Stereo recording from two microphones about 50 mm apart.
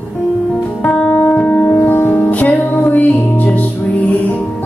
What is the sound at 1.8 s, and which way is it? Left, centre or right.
Music, left.